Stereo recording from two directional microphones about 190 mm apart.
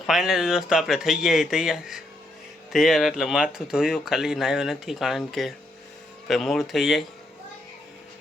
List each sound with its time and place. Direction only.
0.1 s speech: centre (ahead or behind)